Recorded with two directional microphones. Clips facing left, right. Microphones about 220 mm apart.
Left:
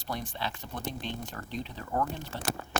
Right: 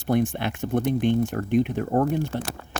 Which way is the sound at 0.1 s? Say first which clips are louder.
Right 13 dB; 50° right (ahead or behind).